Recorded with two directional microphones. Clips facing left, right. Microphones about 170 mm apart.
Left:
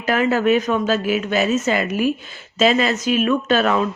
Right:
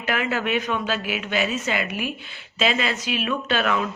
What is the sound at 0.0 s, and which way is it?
Speech, 40° left (ahead or behind).